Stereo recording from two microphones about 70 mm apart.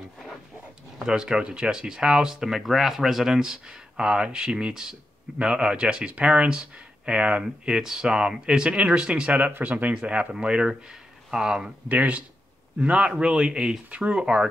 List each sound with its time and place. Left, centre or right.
0.9 s speech: centre
11.9 s speech: right